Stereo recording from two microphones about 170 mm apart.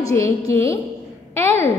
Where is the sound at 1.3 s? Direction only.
15° left (ahead or behind).